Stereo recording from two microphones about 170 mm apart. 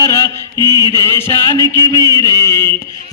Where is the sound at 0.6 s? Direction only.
25° right (ahead or behind).